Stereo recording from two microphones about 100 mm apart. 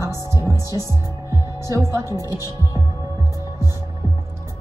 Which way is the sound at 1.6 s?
30° right (ahead or behind).